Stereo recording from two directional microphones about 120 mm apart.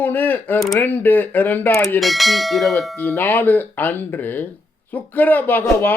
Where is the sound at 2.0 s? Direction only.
Centre (ahead or behind).